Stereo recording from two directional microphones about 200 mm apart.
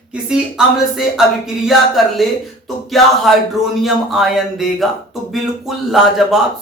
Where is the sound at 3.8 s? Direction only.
Centre (ahead or behind).